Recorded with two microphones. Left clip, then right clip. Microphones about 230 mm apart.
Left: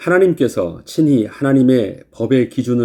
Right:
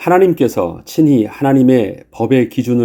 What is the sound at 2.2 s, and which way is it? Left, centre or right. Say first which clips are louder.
Speech: right 2 dB; right.